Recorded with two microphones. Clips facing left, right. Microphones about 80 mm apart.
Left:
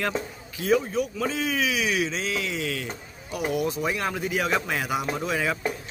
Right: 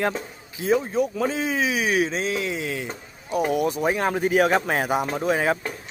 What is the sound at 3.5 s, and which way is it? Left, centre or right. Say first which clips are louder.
A man's voice: right 2 dB; right.